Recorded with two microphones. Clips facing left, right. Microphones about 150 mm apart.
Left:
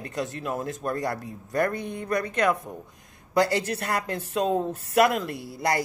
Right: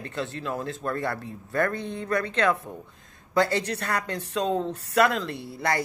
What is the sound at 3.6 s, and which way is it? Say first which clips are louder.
Speech: left 1 dB; 30° left (ahead or behind).